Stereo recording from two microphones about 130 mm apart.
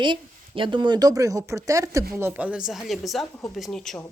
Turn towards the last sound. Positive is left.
turn(degrees=5)  # may be behind; listen again after turning